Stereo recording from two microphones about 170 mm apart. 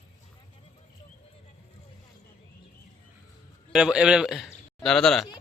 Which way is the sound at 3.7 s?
5° right (ahead or behind).